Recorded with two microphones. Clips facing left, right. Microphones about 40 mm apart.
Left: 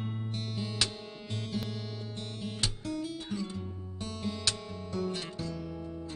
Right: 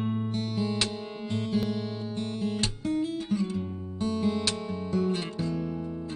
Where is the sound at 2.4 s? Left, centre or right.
Right.